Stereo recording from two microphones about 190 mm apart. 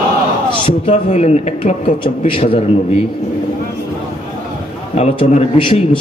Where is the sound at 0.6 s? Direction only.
35° left (ahead or behind).